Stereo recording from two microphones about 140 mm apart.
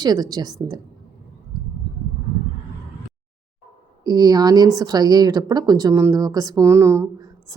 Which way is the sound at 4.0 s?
30° right (ahead or behind).